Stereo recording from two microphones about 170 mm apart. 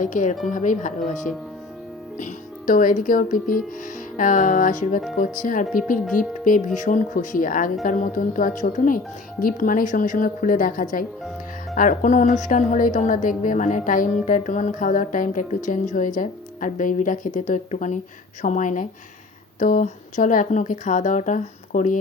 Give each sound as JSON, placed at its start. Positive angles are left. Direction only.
{"t": 0.0, "sound": "a woman's voice", "side_deg": 45}